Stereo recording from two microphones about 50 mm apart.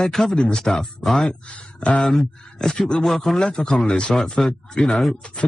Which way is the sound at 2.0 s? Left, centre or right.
Centre.